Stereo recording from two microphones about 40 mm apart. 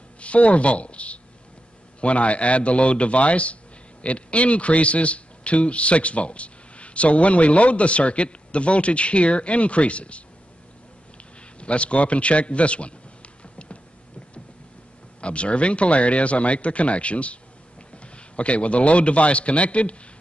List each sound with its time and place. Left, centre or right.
0.2 s a man's voice: left
11.6 s a sound: left
15.1 s a man's voice: left